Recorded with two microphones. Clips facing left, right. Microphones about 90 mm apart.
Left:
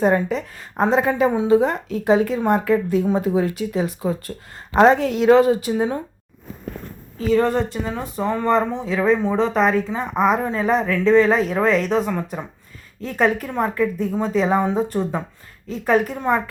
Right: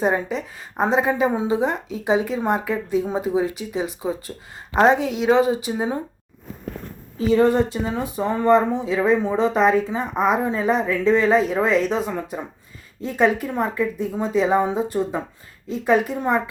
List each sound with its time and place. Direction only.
0.0 s speech: 15° right (ahead or behind)
7.2 s speech: 15° right (ahead or behind)